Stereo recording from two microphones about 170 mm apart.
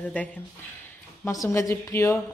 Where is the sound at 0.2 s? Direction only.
10° left (ahead or behind).